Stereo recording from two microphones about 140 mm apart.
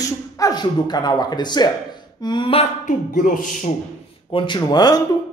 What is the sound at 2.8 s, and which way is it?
Speech, 65° left (ahead or behind).